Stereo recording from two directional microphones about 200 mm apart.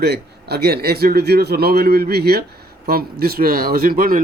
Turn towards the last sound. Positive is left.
turn(degrees=-45)  # may be behind; listen again after turning